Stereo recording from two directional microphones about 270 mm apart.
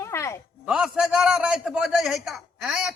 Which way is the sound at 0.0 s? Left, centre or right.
Centre.